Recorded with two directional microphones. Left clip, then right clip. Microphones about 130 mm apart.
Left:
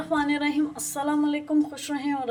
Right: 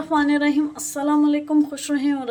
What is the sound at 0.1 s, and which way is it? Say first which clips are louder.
A woman's voice: right 6 dB; 25° right (ahead or behind).